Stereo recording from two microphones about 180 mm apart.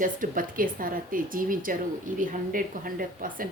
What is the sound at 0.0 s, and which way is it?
Speech, 50° right (ahead or behind).